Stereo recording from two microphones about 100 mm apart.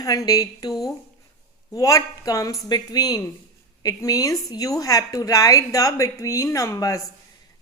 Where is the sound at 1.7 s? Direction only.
35° left (ahead or behind).